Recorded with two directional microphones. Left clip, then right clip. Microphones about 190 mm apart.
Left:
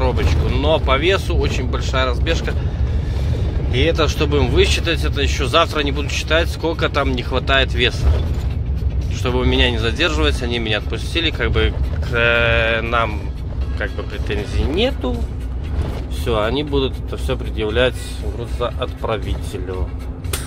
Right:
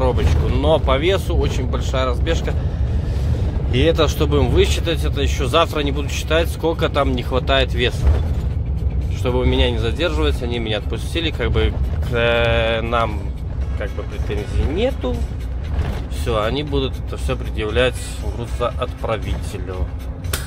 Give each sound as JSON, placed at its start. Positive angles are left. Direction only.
{"t": 0.0, "sound": "speech", "side_deg": -15}
{"t": 3.7, "sound": "speech", "side_deg": -25}
{"t": 9.2, "sound": "speech", "side_deg": -5}
{"t": 16.3, "sound": "speech", "side_deg": 0}